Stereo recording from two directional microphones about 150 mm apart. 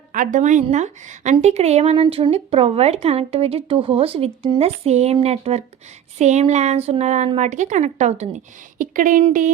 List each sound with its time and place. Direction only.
0.1 s a woman's voice: 60° right (ahead or behind); by 4.6 s 35° right (ahead or behind)
4.6 s a woman's voice: 45° right (ahead or behind)
8.8 s a woman's voice: 60° right (ahead or behind)